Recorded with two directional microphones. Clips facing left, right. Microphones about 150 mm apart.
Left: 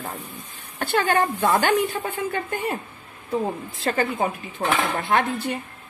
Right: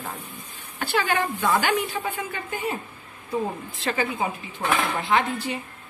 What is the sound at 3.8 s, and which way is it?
A woman's voice, 50° left (ahead or behind).